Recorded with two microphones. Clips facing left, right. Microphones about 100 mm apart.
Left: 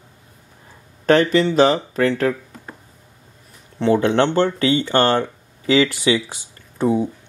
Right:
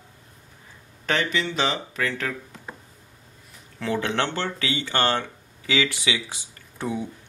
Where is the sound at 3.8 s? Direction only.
35° left (ahead or behind).